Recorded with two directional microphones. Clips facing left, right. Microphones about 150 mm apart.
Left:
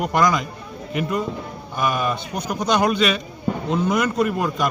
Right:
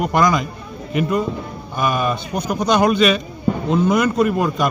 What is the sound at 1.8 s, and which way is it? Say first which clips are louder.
Speech: right 2 dB; 15° right (ahead or behind).